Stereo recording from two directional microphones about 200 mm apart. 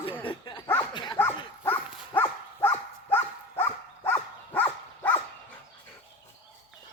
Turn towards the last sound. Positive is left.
turn(degrees=10)  # may be behind; listen again after turning